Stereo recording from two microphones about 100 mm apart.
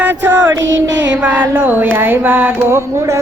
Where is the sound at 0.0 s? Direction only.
20° right (ahead or behind).